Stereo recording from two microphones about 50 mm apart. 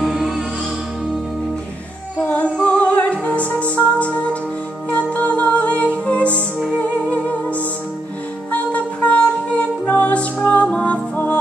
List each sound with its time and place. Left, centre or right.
0.0 s music: centre
2.1 s music: left